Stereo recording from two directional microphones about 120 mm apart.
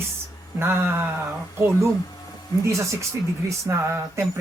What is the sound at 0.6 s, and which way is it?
Speech, 20° right (ahead or behind).